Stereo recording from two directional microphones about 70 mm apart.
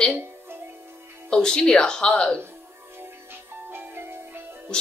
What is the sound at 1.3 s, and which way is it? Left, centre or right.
A woman's voice, centre.